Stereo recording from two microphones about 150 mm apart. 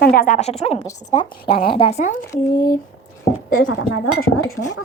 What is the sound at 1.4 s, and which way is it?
Speech, 35° left (ahead or behind).